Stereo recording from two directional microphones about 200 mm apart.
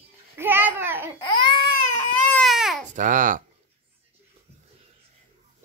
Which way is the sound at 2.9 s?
40° right (ahead or behind).